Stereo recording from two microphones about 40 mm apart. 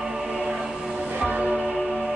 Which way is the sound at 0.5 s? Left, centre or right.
Centre.